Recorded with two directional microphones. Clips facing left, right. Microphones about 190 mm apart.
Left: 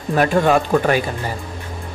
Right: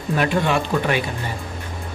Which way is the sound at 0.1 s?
45° left (ahead or behind).